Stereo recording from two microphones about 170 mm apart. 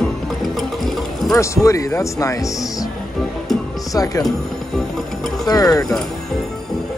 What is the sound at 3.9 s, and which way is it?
Speech, 20° left (ahead or behind).